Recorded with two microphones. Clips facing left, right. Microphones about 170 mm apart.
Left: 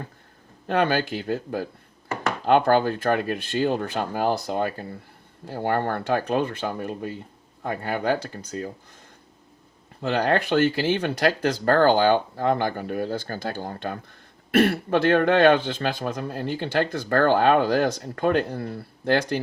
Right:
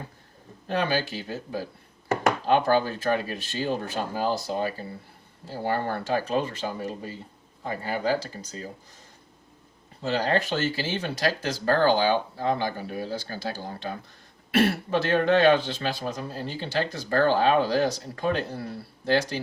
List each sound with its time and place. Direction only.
0.7 s speech: 55° left (ahead or behind)
10.0 s speech: 60° left (ahead or behind)